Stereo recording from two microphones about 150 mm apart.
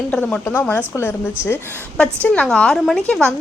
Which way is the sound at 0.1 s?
5° left (ahead or behind).